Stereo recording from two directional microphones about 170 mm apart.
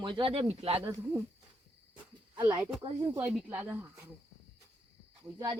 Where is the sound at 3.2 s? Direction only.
10° right (ahead or behind).